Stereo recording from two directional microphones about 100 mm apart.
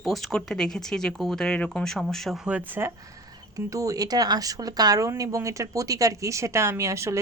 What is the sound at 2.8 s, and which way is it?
Speech, 20° right (ahead or behind).